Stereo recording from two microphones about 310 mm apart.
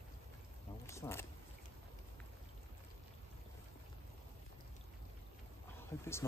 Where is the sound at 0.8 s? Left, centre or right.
Centre.